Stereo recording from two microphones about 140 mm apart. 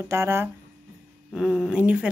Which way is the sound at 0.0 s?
20° right (ahead or behind).